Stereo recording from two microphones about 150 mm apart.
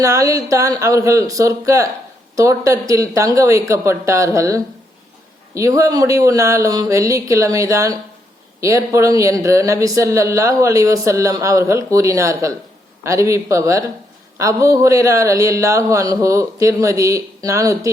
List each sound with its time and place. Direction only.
0.0 s a man's voice: 20° right (ahead or behind)